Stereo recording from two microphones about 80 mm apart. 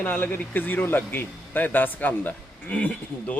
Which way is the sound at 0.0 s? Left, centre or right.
Left.